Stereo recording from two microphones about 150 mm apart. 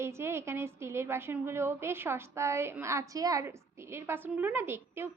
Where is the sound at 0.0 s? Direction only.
15° right (ahead or behind).